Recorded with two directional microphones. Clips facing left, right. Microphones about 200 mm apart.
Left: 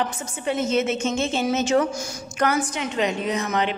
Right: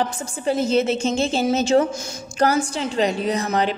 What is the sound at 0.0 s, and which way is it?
A woman's voice, 35° right (ahead or behind).